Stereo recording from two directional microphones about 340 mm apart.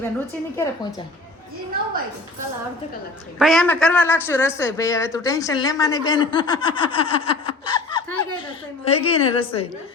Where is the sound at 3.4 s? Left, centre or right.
Centre.